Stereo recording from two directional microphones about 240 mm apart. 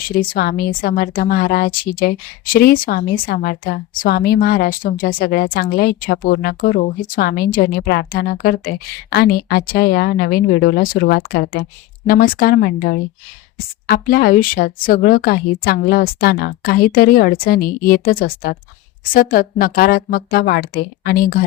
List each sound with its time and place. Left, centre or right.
0.2 s a woman's voice: left